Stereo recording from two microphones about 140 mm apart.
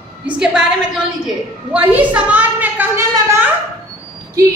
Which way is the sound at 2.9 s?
20° right (ahead or behind).